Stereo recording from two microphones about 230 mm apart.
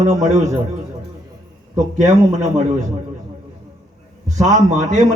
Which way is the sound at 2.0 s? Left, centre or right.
Right.